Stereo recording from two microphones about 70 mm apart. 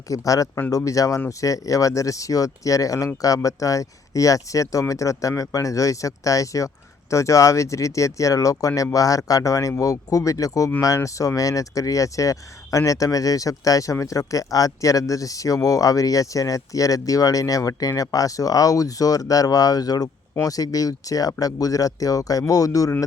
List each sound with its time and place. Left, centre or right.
0.1 s speech: left